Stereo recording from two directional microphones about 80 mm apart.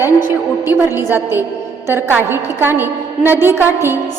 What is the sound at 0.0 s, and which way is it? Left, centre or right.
A woman's voice, right.